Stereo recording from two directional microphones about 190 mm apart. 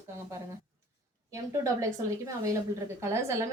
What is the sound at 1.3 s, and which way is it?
A woman's voice, 15° right (ahead or behind).